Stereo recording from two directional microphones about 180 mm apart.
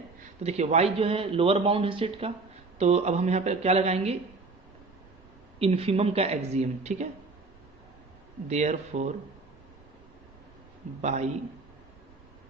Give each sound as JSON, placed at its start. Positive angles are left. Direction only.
{"t": 0.4, "sound": "speech", "side_deg": -40}
{"t": 5.5, "sound": "speech", "side_deg": -35}
{"t": 8.4, "sound": "speech", "side_deg": -40}
{"t": 11.0, "sound": "speech", "side_deg": -40}